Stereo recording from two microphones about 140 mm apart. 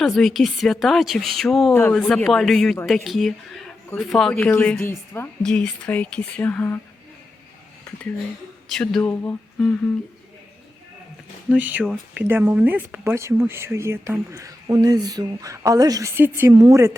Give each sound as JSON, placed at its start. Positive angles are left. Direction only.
{"t": 0.0, "sound": "speech", "side_deg": 0}
{"t": 5.4, "sound": "speech", "side_deg": 5}
{"t": 8.7, "sound": "speech", "side_deg": 5}
{"t": 11.5, "sound": "speech", "side_deg": -10}